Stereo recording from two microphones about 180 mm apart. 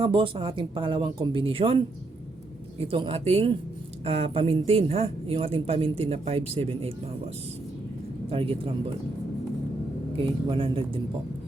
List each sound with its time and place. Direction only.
0.0 s speech: 30° right (ahead or behind)
2.8 s speech: 30° right (ahead or behind)
8.3 s speech: 30° right (ahead or behind)
10.2 s speech: 30° right (ahead or behind)